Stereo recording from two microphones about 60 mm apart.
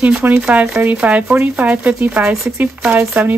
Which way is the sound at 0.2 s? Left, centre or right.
Right.